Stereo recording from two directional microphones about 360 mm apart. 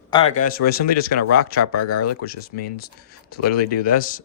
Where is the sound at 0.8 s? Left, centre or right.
Left.